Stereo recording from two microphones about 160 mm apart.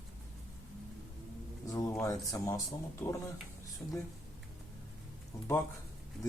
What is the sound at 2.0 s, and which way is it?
A man's voice, 20° left (ahead or behind).